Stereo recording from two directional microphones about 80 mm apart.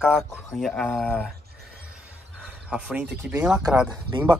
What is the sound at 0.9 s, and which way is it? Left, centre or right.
Speech, centre.